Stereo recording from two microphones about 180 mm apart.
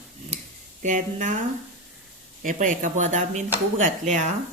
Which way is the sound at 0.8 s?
45° right (ahead or behind).